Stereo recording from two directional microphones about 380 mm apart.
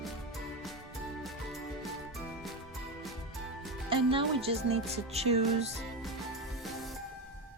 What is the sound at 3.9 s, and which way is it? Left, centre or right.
A woman's voice, centre.